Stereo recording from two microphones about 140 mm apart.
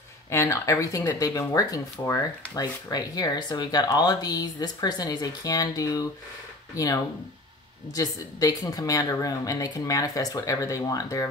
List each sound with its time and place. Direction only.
0.3 s speech: 20° left (ahead or behind)